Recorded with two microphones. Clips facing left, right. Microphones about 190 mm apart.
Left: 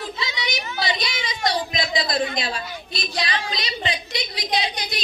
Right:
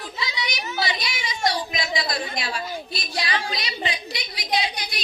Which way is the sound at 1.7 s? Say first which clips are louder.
Left 3 dB; 20° left (ahead or behind).